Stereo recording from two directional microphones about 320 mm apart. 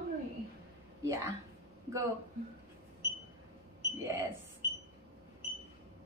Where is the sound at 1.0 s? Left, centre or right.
Centre.